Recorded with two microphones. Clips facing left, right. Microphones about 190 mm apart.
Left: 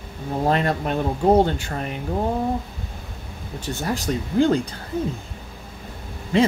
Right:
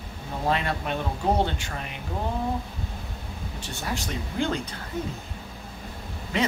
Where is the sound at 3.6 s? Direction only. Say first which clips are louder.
Left 8 dB; 40° left (ahead or behind).